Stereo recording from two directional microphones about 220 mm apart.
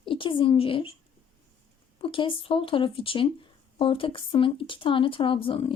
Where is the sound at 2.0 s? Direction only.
25° left (ahead or behind).